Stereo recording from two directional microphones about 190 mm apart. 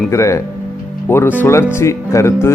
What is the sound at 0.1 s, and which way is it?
A man's voice, 15° left (ahead or behind).